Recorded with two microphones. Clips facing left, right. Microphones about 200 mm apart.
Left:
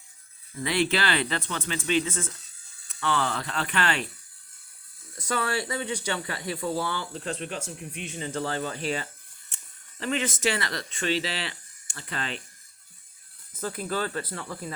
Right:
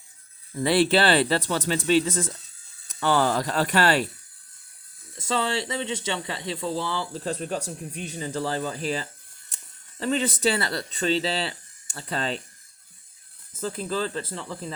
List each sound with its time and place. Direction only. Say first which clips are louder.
0.6 s speech: right 6 dB; 30° right (ahead or behind)
5.1 s speech: right 2 dB; 25° right (ahead or behind)
7.1 s speech: right 4 dB; 40° right (ahead or behind)
13.5 s speech: right 2 dB; 25° right (ahead or behind)